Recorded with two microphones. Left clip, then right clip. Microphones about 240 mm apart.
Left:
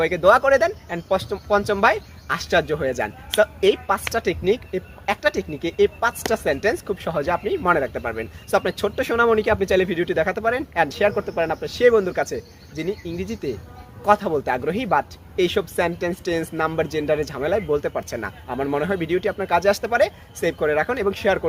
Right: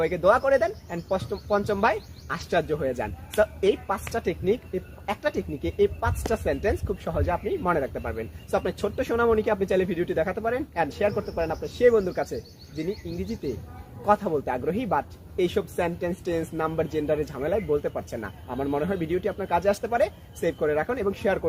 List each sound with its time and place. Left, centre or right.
0.0 s a man's voice: left